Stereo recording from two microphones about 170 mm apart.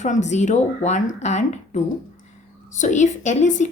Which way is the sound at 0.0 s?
45° left (ahead or behind).